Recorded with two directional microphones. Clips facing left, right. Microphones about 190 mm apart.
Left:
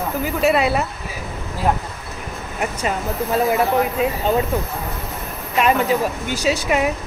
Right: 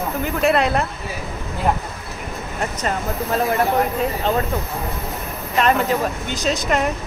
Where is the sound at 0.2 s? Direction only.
5° left (ahead or behind).